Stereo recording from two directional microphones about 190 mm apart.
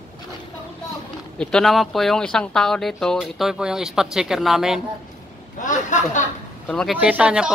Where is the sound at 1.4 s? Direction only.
5° left (ahead or behind).